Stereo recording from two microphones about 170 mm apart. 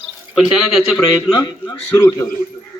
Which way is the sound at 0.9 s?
25° left (ahead or behind).